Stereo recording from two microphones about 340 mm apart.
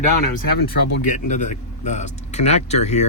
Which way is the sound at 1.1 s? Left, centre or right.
Left.